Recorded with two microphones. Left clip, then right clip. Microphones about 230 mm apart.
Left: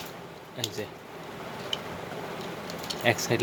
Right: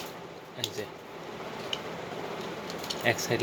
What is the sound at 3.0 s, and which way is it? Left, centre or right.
Speech, centre.